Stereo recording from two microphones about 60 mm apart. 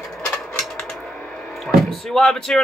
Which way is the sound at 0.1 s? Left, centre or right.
Centre.